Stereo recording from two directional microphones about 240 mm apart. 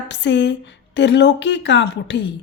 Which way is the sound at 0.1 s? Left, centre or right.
Left.